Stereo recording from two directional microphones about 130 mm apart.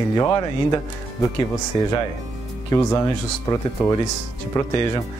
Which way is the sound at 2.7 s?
25° left (ahead or behind).